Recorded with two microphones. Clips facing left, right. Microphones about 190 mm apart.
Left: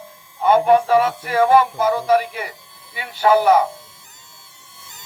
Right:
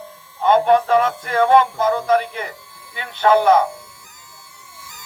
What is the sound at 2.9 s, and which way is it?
Music, 10° left (ahead or behind).